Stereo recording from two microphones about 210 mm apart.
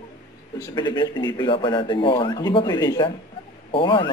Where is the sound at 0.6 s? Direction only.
20° left (ahead or behind).